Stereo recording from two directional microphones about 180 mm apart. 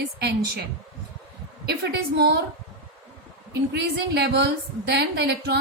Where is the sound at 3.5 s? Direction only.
65° right (ahead or behind).